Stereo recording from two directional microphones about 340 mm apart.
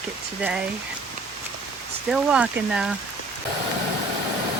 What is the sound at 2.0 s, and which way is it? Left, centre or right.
Speech, centre.